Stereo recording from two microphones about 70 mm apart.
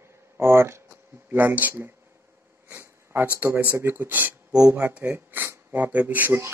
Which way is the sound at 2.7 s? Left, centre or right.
Right.